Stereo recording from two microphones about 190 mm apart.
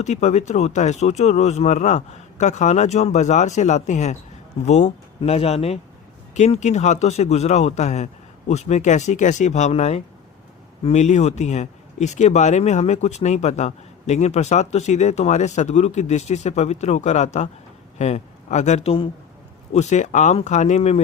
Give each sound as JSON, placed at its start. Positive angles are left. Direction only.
{"t": 0.0, "sound": "speech", "side_deg": 35}